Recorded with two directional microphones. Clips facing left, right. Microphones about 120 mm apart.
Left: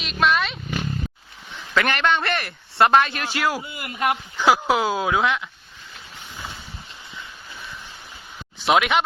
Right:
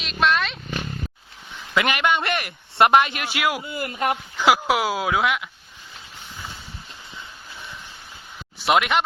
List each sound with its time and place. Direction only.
0.0 s roaring cats: centre (ahead or behind)
1.7 s speech: 10° right (ahead or behind)
3.7 s speech: 40° right (ahead or behind)
4.4 s speech: 10° right (ahead or behind)
8.6 s speech: centre (ahead or behind)